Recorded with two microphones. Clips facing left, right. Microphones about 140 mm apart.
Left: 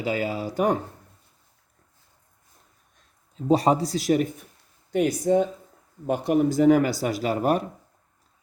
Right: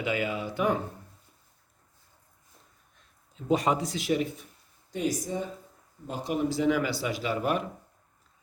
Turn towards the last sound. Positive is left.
turn(degrees=40)  # may be behind; listen again after turning